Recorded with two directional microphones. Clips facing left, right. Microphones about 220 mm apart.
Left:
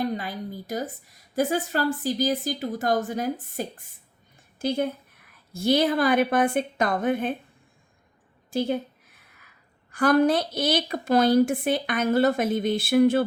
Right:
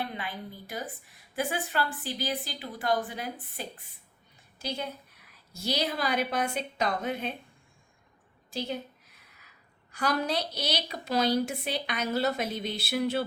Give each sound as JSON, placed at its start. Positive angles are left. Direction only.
{"t": 0.0, "sound": "a woman's voice", "side_deg": 40}
{"t": 8.5, "sound": "a woman's voice", "side_deg": 50}
{"t": 9.9, "sound": "a woman's voice", "side_deg": 50}